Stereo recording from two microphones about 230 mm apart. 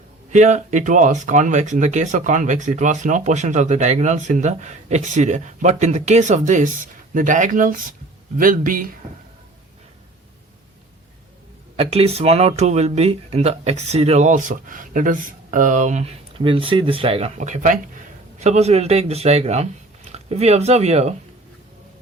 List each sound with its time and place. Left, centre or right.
0.3 s speech: right
11.8 s speech: right